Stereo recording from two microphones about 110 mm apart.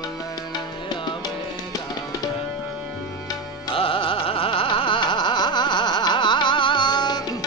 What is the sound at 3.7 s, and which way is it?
Carnatic music, 55° left (ahead or behind).